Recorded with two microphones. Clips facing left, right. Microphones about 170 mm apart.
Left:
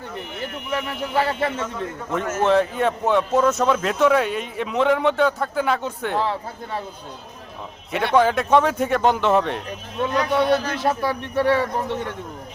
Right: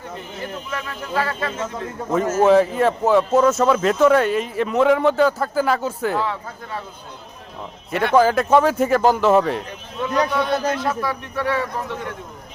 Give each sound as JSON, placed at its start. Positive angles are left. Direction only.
{"t": 1.1, "sound": "a man's voice", "side_deg": 25}
{"t": 2.3, "sound": "a man's voice", "side_deg": -5}
{"t": 7.9, "sound": "a man's voice", "side_deg": 0}
{"t": 10.2, "sound": "a man's voice", "side_deg": -40}
{"t": 10.8, "sound": "a man's voice", "side_deg": 30}